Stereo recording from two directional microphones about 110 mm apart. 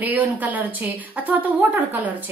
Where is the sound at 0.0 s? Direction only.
15° right (ahead or behind).